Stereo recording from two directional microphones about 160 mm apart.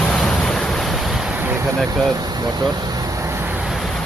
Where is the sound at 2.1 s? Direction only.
25° right (ahead or behind).